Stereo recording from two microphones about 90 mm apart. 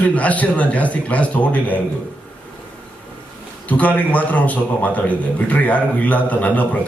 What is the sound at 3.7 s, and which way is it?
A man's voice, 15° left (ahead or behind).